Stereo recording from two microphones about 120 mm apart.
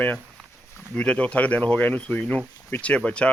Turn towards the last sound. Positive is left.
turn(degrees=10)  # may be behind; listen again after turning